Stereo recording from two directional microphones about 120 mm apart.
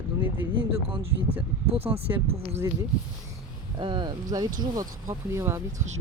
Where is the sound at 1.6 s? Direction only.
55° right (ahead or behind).